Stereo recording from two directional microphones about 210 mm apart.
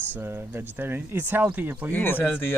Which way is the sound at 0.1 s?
10° right (ahead or behind).